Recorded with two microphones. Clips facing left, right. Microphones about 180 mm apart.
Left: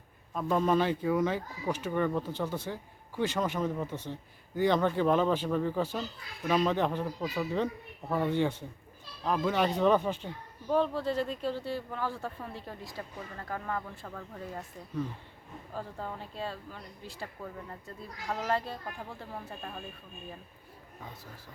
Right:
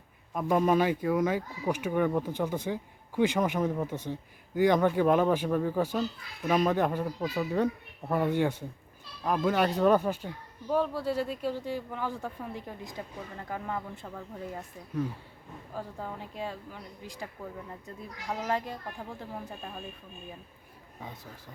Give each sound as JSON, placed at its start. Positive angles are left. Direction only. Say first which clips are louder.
{"t": 0.3, "sound": "speech", "louder": "right 2 dB", "side_deg": -15}